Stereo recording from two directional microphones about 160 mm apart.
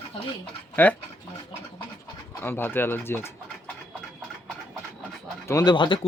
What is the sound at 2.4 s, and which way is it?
Speech, 15° left (ahead or behind).